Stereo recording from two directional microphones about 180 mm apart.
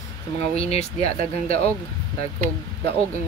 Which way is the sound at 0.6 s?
35° left (ahead or behind).